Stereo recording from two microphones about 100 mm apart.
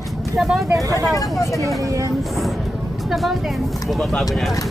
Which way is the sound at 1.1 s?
30° left (ahead or behind).